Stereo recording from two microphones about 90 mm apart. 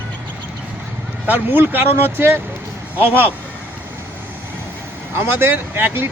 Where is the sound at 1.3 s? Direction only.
25° right (ahead or behind).